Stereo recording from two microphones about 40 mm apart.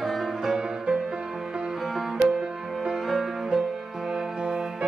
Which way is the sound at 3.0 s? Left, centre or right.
Centre.